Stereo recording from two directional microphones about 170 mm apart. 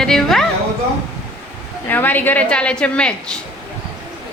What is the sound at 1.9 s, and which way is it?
A woman's voice, 10° left (ahead or behind).